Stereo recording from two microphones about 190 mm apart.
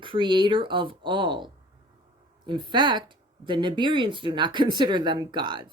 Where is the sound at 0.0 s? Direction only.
25° right (ahead or behind).